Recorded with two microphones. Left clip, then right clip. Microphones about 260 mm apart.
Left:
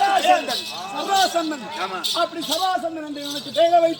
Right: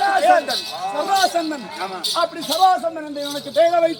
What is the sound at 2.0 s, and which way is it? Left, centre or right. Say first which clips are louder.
Music: right 3 dB; centre.